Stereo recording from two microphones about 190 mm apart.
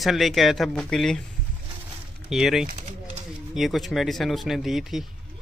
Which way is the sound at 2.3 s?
Centre (ahead or behind).